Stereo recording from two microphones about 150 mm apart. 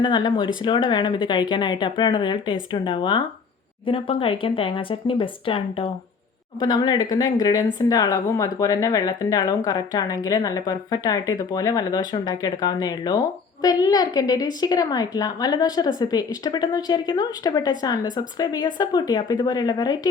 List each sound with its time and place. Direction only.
0.0 s speech: 30° left (ahead or behind)